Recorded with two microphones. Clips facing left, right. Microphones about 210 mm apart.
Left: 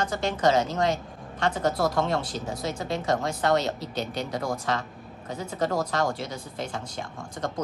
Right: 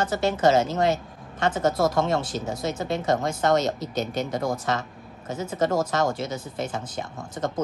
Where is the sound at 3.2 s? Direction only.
45° right (ahead or behind).